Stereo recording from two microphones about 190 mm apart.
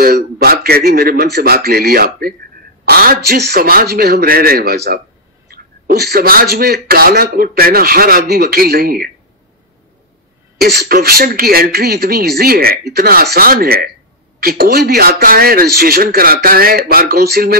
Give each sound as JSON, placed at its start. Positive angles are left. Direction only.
{"t": 0.0, "sound": "speech", "side_deg": -50}
{"t": 10.6, "sound": "speech", "side_deg": -55}